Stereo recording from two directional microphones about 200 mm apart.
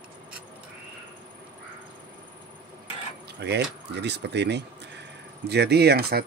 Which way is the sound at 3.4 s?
60° right (ahead or behind).